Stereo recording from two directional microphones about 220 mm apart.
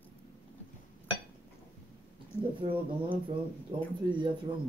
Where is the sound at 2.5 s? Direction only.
25° right (ahead or behind).